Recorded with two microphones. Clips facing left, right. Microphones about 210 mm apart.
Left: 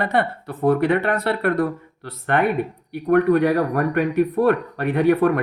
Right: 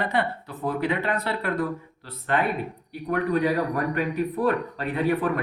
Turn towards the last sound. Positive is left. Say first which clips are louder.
# left 7 dB
turn(degrees=65)  # may be behind; listen again after turning